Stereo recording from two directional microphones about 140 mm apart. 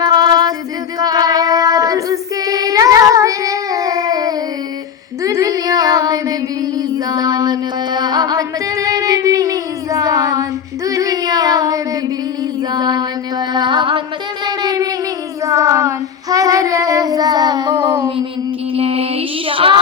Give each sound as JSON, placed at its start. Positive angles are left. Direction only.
{"t": 0.0, "sound": "music", "side_deg": -30}
{"t": 0.9, "sound": "female singing", "side_deg": -30}
{"t": 5.2, "sound": "a sound", "side_deg": -25}
{"t": 6.7, "sound": "music", "side_deg": -30}
{"t": 10.8, "sound": "female singing", "side_deg": -25}
{"t": 12.7, "sound": "a sound", "side_deg": -30}
{"t": 13.5, "sound": "music", "side_deg": -35}
{"t": 14.4, "sound": "a sound", "side_deg": -30}
{"t": 15.4, "sound": "child singing", "side_deg": -25}
{"t": 18.7, "sound": "mantra", "side_deg": -45}